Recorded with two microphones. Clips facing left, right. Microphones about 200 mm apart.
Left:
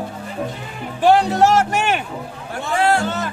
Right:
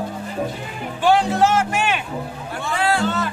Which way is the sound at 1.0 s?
40° left (ahead or behind).